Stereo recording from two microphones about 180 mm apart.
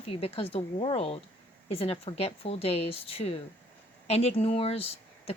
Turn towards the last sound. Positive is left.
turn(degrees=30)  # may be behind; listen again after turning